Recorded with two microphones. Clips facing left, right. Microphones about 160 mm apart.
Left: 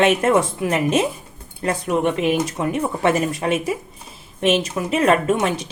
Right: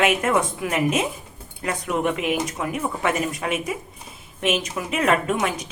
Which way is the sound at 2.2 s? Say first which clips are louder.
Left 5 dB; 30° left (ahead or behind).